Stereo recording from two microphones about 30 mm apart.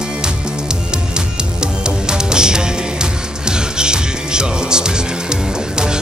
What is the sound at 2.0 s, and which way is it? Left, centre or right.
Music, right.